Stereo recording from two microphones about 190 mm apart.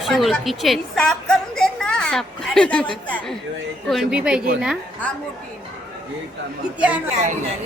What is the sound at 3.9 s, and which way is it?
Speech, 5° right (ahead or behind).